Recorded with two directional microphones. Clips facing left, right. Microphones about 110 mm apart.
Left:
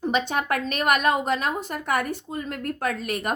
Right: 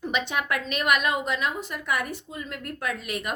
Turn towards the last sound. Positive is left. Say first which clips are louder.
# left 4 dB
turn(degrees=45)  # may be behind; listen again after turning